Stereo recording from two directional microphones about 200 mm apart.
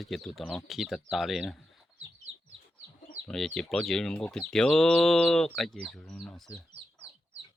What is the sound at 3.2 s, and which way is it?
Speech, centre (ahead or behind).